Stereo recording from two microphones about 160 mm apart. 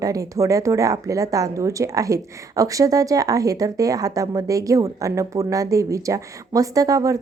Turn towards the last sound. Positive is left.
turn(degrees=-20)  # may be behind; listen again after turning